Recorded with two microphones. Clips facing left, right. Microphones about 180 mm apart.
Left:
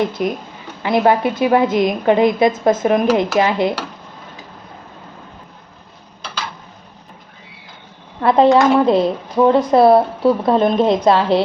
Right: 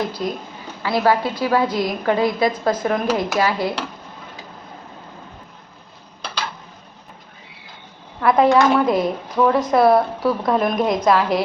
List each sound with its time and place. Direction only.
0.0 s speech: 20° left (ahead or behind)
8.2 s speech: 30° left (ahead or behind)